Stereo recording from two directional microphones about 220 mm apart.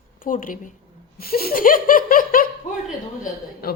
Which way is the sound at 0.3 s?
40° left (ahead or behind).